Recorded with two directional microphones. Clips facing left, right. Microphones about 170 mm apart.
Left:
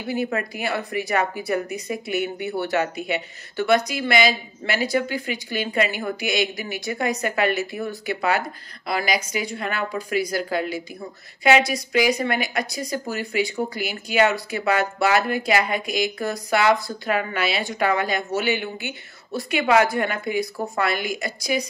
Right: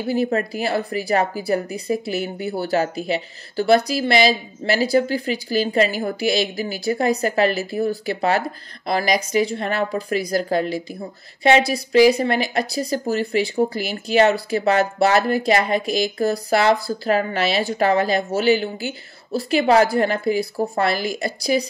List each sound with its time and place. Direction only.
0.1 s speech: 35° right (ahead or behind)